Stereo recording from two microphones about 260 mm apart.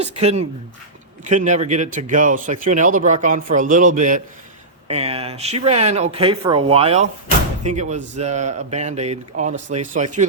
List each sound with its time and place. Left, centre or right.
0.0 s a man's voice: right